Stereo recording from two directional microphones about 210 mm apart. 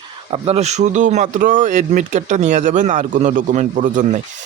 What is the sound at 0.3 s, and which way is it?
Speech, 30° right (ahead or behind).